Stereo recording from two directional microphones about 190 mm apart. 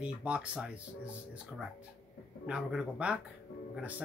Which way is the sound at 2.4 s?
5° right (ahead or behind).